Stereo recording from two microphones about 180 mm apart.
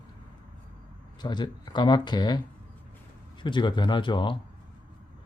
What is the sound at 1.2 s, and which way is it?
Speech, 25° left (ahead or behind).